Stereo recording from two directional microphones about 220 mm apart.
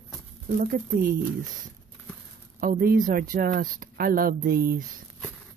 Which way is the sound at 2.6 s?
40° right (ahead or behind).